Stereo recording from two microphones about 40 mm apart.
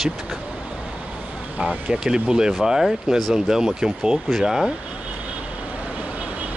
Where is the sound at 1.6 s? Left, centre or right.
Centre.